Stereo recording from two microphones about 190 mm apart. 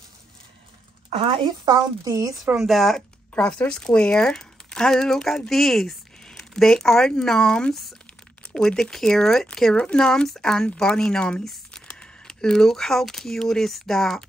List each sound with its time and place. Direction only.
1.1 s a woman's voice: 25° right (ahead or behind)
2.4 s speech: centre (ahead or behind)